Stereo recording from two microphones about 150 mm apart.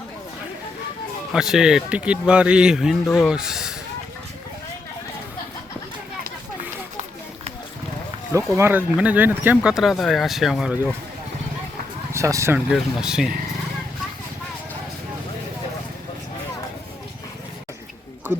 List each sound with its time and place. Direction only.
1.3 s speech: 5° right (ahead or behind)
8.3 s speech: 20° right (ahead or behind); by 10.9 s 5° right (ahead or behind)
12.1 s speech: 20° right (ahead or behind)
12.5 s speech: 5° right (ahead or behind)